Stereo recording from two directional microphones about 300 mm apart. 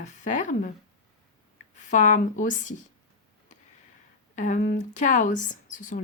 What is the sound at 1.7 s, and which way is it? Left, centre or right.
Speech, left.